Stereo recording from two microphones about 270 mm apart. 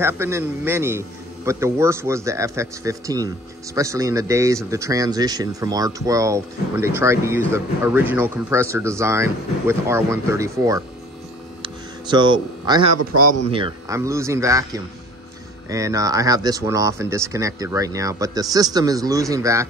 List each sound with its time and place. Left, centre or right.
0.0 s speech: centre
11.6 s hum: centre
13.0 s speech: right
13.5 s speech: centre